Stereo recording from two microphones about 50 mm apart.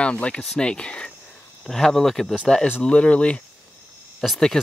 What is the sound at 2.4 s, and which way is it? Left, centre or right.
Speech, centre.